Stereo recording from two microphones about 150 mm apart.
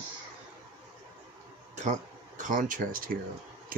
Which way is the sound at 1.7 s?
50° right (ahead or behind).